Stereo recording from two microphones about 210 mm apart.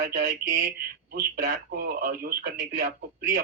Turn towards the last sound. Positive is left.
turn(degrees=-40)  # may be behind; listen again after turning